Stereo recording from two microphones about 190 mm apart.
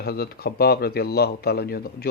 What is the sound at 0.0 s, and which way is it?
Speech, 55° left (ahead or behind).